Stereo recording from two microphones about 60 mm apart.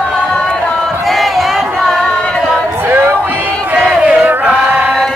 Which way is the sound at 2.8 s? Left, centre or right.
Right.